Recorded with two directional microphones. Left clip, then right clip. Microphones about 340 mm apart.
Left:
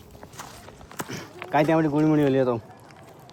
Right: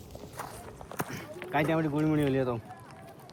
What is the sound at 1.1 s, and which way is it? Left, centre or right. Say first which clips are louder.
Speech: left 7 dB; centre.